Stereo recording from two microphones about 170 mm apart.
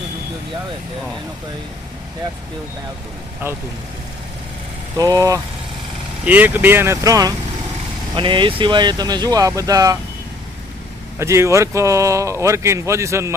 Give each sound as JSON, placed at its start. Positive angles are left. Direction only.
{"t": 3.4, "sound": "speech", "side_deg": -15}
{"t": 4.9, "sound": "speech", "side_deg": -20}
{"t": 11.2, "sound": "speech", "side_deg": -15}